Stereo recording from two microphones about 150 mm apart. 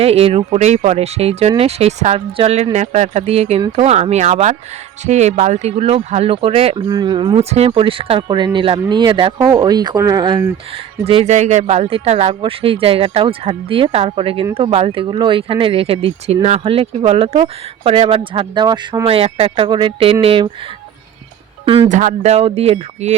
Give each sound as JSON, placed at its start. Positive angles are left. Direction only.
{"t": 0.0, "sound": "speech", "side_deg": -40}
{"t": 11.0, "sound": "speech", "side_deg": -40}
{"t": 19.0, "sound": "speech", "side_deg": -40}
{"t": 21.6, "sound": "music", "side_deg": -40}
{"t": 21.8, "sound": "speech", "side_deg": -55}